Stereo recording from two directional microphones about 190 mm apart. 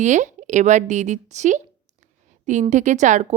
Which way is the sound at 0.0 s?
40° right (ahead or behind).